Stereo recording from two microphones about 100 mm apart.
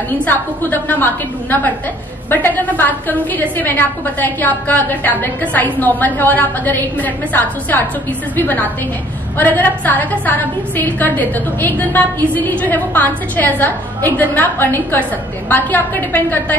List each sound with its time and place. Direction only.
0.2 s a woman's voice: 20° left (ahead or behind)